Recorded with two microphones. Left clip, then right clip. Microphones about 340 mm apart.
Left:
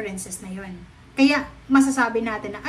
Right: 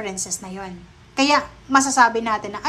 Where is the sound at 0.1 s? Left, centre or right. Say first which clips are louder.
Right 7 dB; right.